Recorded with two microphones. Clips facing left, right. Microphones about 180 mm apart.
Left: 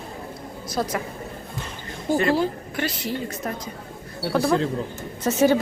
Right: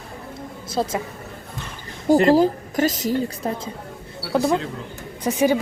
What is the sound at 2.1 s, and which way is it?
A woman's voice, 40° right (ahead or behind).